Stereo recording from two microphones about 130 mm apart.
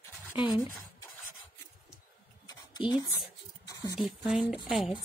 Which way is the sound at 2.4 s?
30° left (ahead or behind).